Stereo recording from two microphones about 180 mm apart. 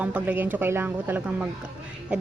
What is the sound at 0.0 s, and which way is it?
A woman's voice, 10° right (ahead or behind).